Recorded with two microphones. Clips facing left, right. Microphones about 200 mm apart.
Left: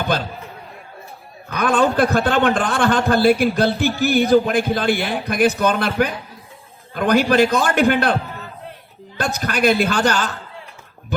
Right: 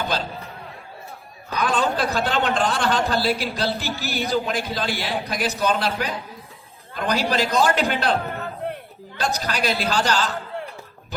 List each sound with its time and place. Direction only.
0.1 s speech: 55° left (ahead or behind)
1.5 s a man's voice: 55° left (ahead or behind)
8.6 s a sound: 55° right (ahead or behind)
9.1 s a man's voice: 55° left (ahead or behind)